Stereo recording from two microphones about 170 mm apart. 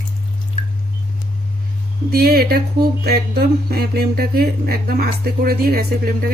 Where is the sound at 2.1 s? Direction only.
65° right (ahead or behind).